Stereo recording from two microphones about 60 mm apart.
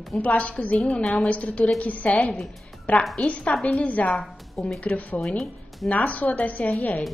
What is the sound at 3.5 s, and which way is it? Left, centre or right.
Speech, centre.